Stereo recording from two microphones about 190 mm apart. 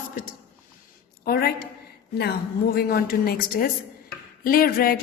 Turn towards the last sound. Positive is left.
turn(degrees=50)  # may be behind; listen again after turning